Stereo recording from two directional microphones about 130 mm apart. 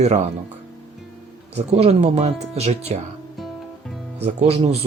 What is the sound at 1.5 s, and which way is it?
Speech, 50° right (ahead or behind).